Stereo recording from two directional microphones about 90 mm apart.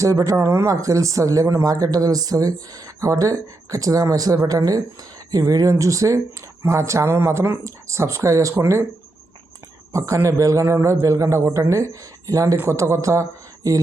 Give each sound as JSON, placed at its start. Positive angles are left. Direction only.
{"t": 0.0, "sound": "speech", "side_deg": -40}
{"t": 9.9, "sound": "speech", "side_deg": -35}